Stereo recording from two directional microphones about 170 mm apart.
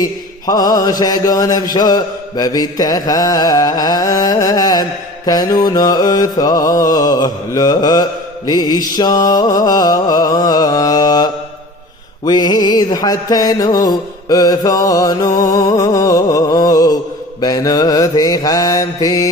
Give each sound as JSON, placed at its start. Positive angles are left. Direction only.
{"t": 0.0, "sound": "mantra", "side_deg": 20}